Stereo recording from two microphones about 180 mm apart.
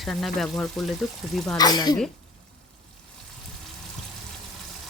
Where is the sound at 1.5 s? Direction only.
20° left (ahead or behind).